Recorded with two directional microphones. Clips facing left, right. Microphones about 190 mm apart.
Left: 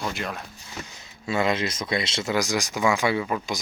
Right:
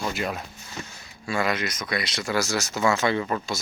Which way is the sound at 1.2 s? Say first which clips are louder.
Left 2 dB; 25° left (ahead or behind).